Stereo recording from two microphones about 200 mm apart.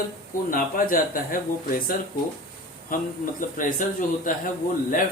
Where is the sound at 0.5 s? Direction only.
45° left (ahead or behind).